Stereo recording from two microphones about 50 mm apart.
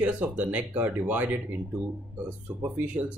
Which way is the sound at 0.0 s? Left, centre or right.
Right.